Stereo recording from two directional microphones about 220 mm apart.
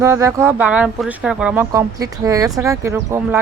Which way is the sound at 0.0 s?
15° right (ahead or behind).